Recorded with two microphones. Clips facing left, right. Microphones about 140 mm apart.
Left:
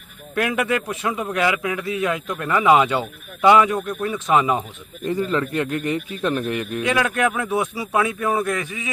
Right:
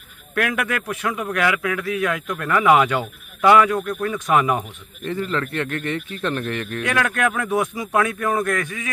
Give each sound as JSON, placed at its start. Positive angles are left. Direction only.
{"t": 0.5, "sound": "a man's voice", "side_deg": 15}